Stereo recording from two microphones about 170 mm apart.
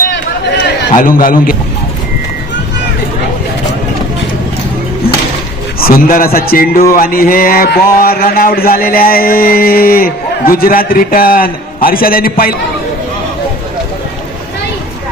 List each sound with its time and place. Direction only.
0.9 s speech: 55° left (ahead or behind)
5.8 s speech: 60° left (ahead or behind)